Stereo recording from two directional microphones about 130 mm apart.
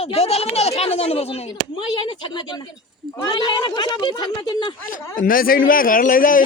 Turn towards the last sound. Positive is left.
turn(degrees=90)